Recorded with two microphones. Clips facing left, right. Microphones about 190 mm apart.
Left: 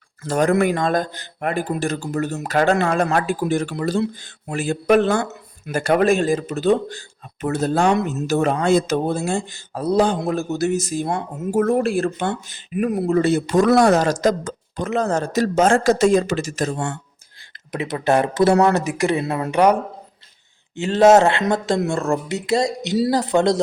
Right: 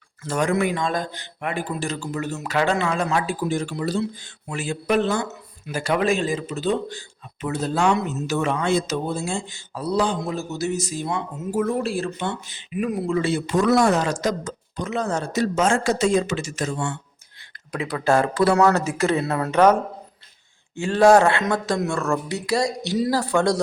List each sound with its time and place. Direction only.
0.2 s speech: 40° left (ahead or behind)
1.7 s speech: 55° left (ahead or behind)
15.5 s speech: 50° left (ahead or behind)
17.7 s speech: 20° left (ahead or behind)